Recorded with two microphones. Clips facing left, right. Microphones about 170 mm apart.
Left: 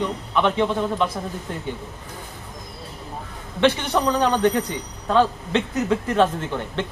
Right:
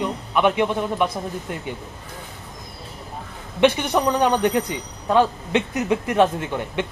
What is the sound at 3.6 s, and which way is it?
A man's voice, 15° right (ahead or behind).